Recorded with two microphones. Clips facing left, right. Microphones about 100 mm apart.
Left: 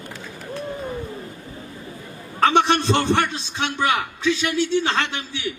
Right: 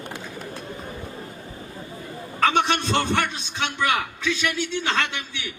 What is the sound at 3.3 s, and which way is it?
A man's voice, 20° left (ahead or behind).